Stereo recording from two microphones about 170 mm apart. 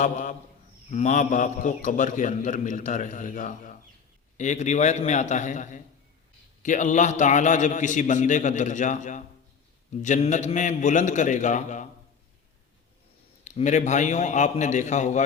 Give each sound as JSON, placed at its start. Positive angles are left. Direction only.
{"t": 0.0, "sound": "a man's voice", "side_deg": 45}
{"t": 13.4, "sound": "a man's voice", "side_deg": 45}